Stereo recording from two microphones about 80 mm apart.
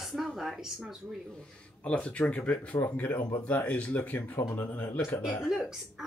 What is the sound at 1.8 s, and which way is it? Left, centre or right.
Speech, centre.